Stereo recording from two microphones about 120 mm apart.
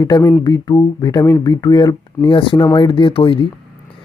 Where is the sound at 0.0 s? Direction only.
25° left (ahead or behind).